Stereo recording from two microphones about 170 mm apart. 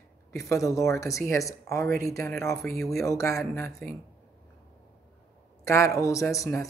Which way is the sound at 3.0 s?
20° left (ahead or behind).